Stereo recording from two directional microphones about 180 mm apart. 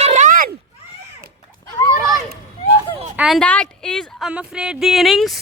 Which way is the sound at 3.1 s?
Centre (ahead or behind).